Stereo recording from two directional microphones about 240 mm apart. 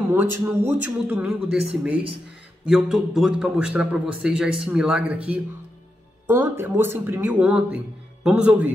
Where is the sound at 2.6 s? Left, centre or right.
Centre.